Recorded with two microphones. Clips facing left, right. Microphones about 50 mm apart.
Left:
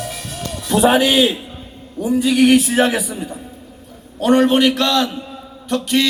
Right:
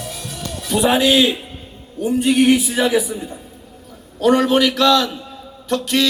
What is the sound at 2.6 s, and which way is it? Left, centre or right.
Speech, left.